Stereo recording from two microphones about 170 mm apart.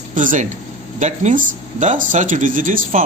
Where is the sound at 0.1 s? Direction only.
50° right (ahead or behind).